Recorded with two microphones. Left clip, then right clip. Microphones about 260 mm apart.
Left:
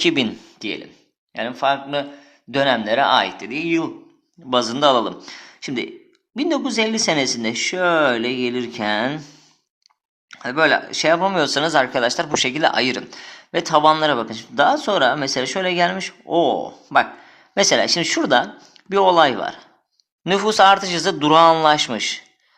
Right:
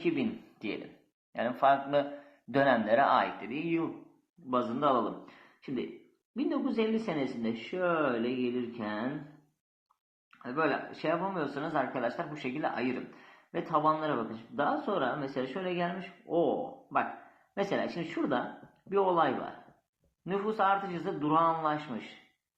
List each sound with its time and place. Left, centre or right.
0.6 s speech: left
10.2 s speech: left